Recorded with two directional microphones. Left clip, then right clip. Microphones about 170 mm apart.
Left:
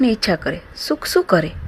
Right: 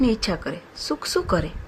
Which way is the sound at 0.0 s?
20° left (ahead or behind).